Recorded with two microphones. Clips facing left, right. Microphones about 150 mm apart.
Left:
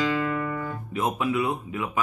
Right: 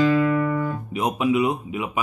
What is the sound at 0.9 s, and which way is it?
Speech, 20° right (ahead or behind).